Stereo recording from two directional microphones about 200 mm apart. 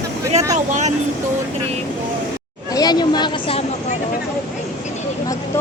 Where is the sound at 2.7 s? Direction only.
20° left (ahead or behind).